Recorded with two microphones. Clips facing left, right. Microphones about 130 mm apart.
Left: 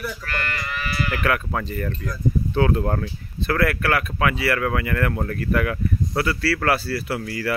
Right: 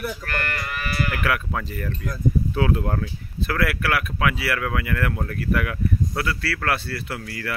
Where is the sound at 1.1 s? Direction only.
5° right (ahead or behind).